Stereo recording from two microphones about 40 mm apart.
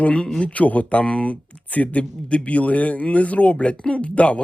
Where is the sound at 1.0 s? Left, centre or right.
Left.